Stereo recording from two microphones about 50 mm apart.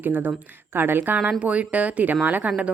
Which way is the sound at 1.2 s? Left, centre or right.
Right.